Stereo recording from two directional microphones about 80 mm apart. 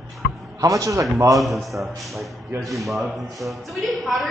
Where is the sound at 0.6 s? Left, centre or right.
Right.